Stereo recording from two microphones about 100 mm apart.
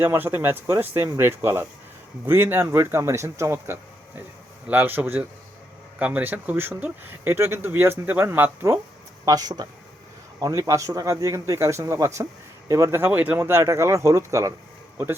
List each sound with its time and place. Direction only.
0.0 s speech: 20° right (ahead or behind)
9.2 s a man's voice: 40° right (ahead or behind)
13.1 s speech: 15° right (ahead or behind)
13.4 s a man's voice: 30° right (ahead or behind)